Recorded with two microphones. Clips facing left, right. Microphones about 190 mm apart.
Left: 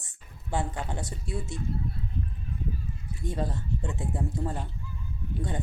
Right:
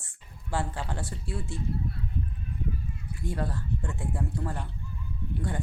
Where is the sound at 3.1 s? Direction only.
20° left (ahead or behind).